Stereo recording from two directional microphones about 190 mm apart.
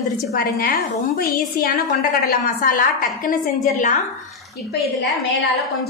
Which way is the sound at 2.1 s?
45° left (ahead or behind).